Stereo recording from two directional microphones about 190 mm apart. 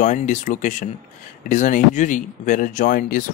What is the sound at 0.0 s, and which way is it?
Speech, 40° left (ahead or behind).